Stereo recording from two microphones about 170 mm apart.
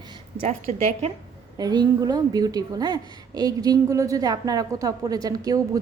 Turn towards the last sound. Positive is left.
turn(degrees=-20)  # may be behind; listen again after turning